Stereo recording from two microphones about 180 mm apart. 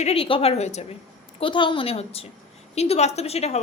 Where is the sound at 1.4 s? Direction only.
25° left (ahead or behind).